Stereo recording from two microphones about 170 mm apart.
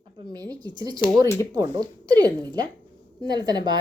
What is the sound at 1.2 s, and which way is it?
Speech, 15° left (ahead or behind).